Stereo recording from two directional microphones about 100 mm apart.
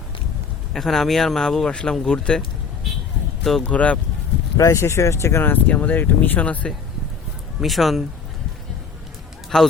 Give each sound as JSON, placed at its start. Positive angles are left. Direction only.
{"t": 0.7, "sound": "speech", "side_deg": 5}
{"t": 3.6, "sound": "speech", "side_deg": 15}
{"t": 4.5, "sound": "speech", "side_deg": 30}
{"t": 7.6, "sound": "speech", "side_deg": 0}
{"t": 9.5, "sound": "speech", "side_deg": 5}